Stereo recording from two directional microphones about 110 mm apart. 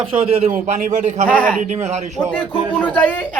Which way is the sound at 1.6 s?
90° right.